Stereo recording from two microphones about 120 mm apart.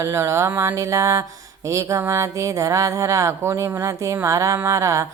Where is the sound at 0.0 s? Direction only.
25° right (ahead or behind).